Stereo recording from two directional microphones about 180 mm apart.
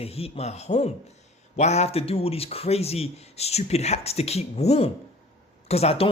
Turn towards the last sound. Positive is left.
turn(degrees=35)  # may be behind; listen again after turning